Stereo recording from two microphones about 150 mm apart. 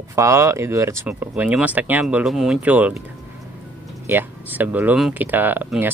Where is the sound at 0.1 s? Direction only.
20° right (ahead or behind).